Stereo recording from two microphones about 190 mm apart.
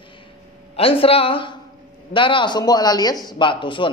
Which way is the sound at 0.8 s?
30° left (ahead or behind).